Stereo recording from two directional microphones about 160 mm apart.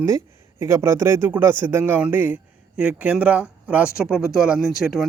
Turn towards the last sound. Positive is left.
turn(degrees=0)  # may be behind; listen again after turning